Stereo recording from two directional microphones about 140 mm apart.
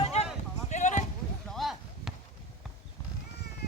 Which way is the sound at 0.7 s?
60° left (ahead or behind).